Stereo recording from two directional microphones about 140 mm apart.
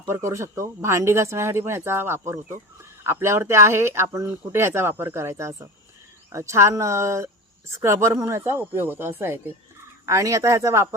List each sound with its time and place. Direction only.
0.1 s speech: 20° right (ahead or behind)